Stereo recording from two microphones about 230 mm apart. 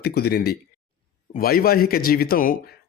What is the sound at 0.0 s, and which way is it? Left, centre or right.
Speech, left.